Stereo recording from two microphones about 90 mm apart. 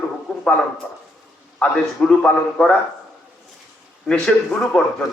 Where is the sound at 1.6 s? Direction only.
10° left (ahead or behind).